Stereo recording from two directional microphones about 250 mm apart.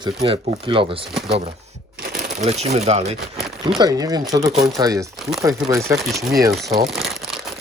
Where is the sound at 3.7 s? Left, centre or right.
Centre.